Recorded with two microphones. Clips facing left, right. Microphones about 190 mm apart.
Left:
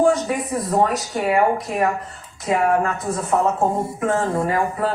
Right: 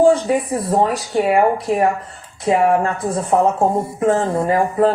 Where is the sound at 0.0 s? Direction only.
30° right (ahead or behind).